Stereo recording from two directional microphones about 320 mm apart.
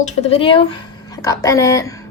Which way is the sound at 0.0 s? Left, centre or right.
Centre.